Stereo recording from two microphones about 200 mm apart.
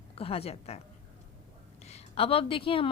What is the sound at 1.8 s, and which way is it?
Speech, 30° left (ahead or behind).